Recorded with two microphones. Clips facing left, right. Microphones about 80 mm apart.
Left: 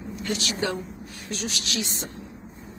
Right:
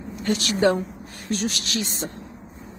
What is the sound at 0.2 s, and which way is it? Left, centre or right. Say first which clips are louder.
A woman's voice: right 8 dB; right.